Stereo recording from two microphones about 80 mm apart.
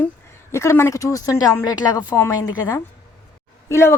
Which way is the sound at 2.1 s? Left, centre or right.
Left.